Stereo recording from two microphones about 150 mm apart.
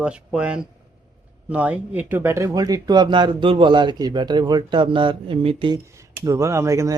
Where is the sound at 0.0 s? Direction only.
5° right (ahead or behind); by 5.8 s 35° right (ahead or behind).